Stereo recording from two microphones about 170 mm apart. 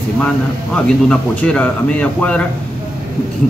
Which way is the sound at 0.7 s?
5° left (ahead or behind).